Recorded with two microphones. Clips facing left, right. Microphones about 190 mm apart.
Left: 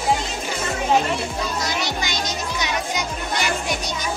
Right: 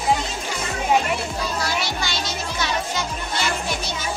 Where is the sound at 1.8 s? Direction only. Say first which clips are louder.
Left 1 dB; 15° left (ahead or behind).